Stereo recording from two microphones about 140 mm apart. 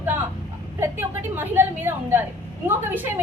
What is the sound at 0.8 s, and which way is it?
A woman's voice, 15° right (ahead or behind).